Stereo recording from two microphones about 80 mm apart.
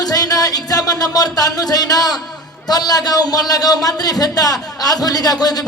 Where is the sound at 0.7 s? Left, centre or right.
Left.